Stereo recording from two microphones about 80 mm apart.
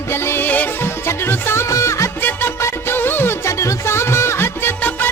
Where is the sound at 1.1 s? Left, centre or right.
Left.